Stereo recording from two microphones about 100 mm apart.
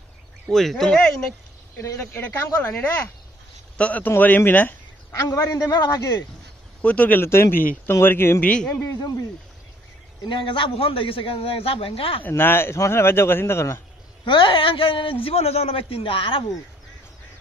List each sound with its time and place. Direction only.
0.5 s speech: centre (ahead or behind)
1.8 s speech: 25° left (ahead or behind)
5.1 s a man's voice: 30° left (ahead or behind)
6.8 s speech: 15° left (ahead or behind)
10.2 s a man's voice: 55° left (ahead or behind)
12.2 s speech: 20° left (ahead or behind)
14.2 s a man's voice: 55° left (ahead or behind)